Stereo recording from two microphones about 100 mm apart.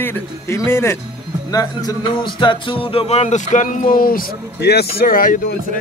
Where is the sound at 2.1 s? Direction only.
55° left (ahead or behind); by 3.3 s 80° left.